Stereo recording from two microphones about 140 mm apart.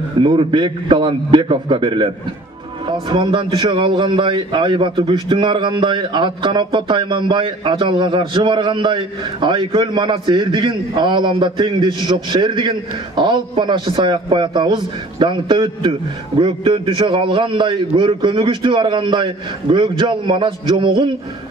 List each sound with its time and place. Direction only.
0.2 s a man's voice: 35° right (ahead or behind)